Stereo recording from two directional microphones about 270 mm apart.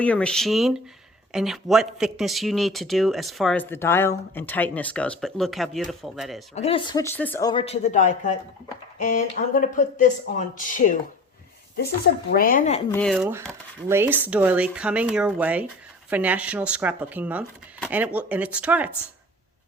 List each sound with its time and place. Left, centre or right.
0.0 s speech: centre
6.5 s speech: left
12.9 s speech: centre